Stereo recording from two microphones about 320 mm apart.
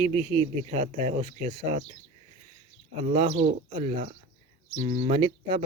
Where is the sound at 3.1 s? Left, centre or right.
Centre.